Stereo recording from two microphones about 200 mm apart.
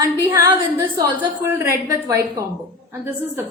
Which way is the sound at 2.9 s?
10° right (ahead or behind).